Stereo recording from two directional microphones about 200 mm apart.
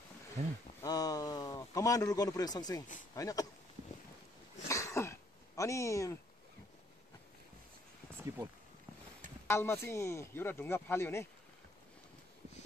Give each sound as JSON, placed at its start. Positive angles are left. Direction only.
{"t": 0.4, "sound": "speech", "side_deg": -35}
{"t": 0.8, "sound": "a sound", "side_deg": 15}
{"t": 3.2, "sound": "speech", "side_deg": 15}
{"t": 4.6, "sound": "throat clearing", "side_deg": 15}
{"t": 8.3, "sound": "speech", "side_deg": -15}
{"t": 9.5, "sound": "speech", "side_deg": 15}